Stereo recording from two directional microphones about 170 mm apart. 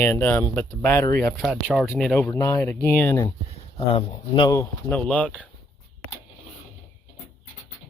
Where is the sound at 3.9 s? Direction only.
25° left (ahead or behind).